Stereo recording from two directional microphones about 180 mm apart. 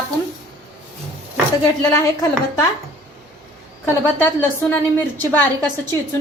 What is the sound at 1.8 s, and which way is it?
Speech, 15° left (ahead or behind).